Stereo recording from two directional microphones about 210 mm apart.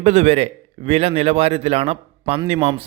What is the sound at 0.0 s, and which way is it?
A man's voice, 30° right (ahead or behind).